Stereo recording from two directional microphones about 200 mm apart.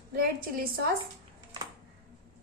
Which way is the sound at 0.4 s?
45° right (ahead or behind).